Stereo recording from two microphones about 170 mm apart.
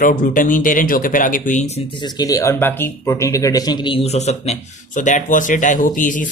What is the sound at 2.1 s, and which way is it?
A man's voice, 20° left (ahead or behind).